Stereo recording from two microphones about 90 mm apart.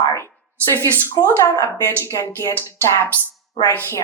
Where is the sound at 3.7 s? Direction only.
25° left (ahead or behind).